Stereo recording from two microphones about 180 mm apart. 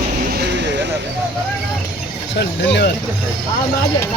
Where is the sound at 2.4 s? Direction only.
70° left (ahead or behind).